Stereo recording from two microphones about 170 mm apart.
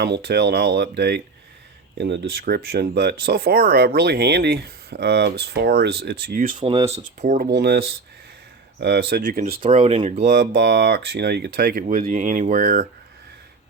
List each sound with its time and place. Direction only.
0.0 s speech: 70° right (ahead or behind)
2.0 s speech: 90° right; by 6.6 s 60° right (ahead or behind)
6.6 s speech: 30° right (ahead or behind)
7.0 s speech: 50° right (ahead or behind)
7.5 s speech: 70° right (ahead or behind)
9.6 s speech: 45° right (ahead or behind)
10.3 s speech: 65° right (ahead or behind); by 12.9 s 50° right (ahead or behind)